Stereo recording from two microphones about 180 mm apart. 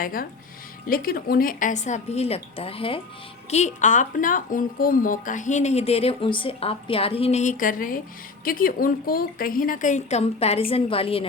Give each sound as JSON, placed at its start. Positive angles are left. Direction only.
{"t": 0.0, "sound": "a woman's voice", "side_deg": 50}
{"t": 3.5, "sound": "a woman's voice", "side_deg": 40}